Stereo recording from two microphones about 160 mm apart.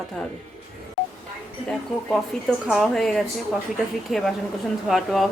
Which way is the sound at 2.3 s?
5° left (ahead or behind).